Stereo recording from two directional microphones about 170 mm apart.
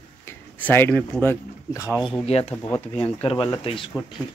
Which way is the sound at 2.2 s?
35° left (ahead or behind).